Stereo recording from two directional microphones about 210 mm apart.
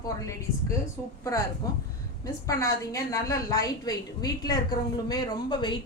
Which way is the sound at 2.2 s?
15° left (ahead or behind).